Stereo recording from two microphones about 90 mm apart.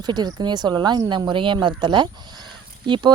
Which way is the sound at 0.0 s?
50° right (ahead or behind).